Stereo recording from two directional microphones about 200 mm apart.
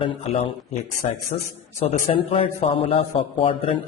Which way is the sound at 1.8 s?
30° left (ahead or behind).